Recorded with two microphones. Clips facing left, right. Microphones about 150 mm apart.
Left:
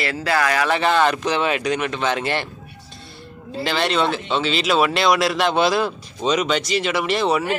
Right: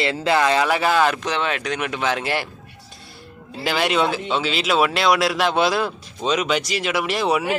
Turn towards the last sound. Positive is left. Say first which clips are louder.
# left 1 dB
turn(degrees=-5)  # may be behind; listen again after turning